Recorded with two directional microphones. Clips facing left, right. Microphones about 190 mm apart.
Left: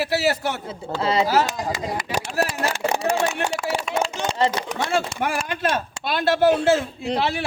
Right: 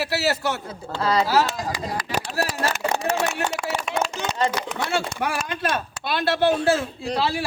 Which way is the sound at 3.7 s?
30° left (ahead or behind).